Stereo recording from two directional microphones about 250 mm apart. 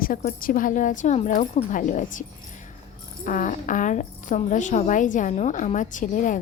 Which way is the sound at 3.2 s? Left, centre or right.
Left.